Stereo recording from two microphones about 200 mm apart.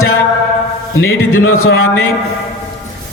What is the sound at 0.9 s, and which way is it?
Speech, 90° left.